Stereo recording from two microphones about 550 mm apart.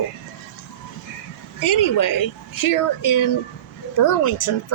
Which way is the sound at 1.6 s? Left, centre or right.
Left.